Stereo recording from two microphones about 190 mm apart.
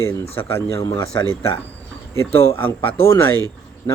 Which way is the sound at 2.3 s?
10° left (ahead or behind).